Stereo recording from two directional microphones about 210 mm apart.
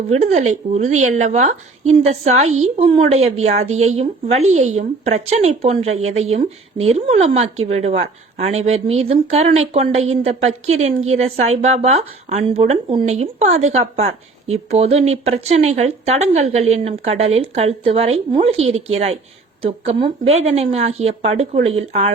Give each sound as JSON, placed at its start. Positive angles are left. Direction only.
{"t": 0.1, "sound": "a woman's voice", "side_deg": -35}